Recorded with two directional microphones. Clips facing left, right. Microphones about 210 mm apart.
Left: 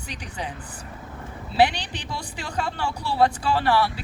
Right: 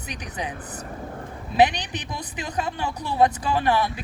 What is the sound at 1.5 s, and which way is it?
A woman's voice, 20° right (ahead or behind).